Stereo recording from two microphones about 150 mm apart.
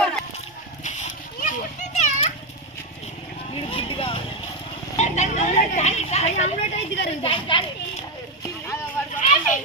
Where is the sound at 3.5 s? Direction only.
35° left (ahead or behind).